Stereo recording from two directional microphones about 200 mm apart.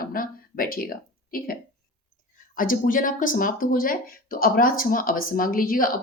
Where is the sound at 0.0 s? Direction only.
45° left (ahead or behind).